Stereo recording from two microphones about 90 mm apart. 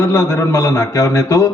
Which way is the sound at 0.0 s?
30° left (ahead or behind).